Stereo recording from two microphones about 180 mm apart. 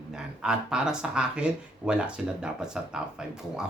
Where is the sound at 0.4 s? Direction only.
5° right (ahead or behind).